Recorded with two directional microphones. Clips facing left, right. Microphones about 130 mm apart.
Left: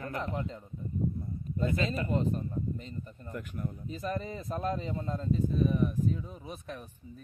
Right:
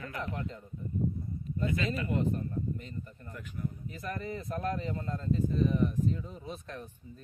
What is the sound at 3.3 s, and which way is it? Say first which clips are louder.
Speech: left 2 dB; 55° left (ahead or behind).